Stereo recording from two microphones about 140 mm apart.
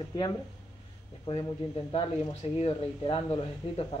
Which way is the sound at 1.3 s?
45° left (ahead or behind).